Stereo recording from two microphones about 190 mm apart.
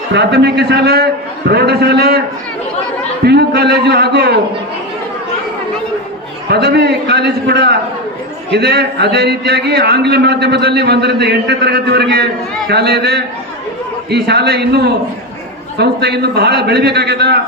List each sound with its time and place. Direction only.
0.1 s a man's voice: 65° right (ahead or behind)
3.2 s a man's voice: 60° right (ahead or behind)
6.5 s a man's voice: 60° right (ahead or behind)